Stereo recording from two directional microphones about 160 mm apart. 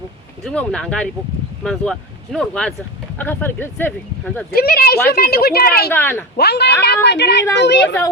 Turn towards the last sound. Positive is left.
turn(degrees=90)